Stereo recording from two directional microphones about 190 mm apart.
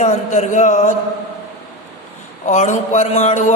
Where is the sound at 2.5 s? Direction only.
40° left (ahead or behind).